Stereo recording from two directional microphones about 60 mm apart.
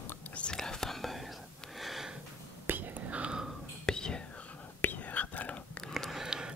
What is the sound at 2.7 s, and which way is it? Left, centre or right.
Whispering, right.